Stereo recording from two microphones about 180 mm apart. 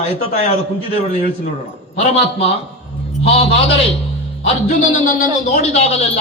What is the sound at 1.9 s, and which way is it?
A man's voice, 35° left (ahead or behind).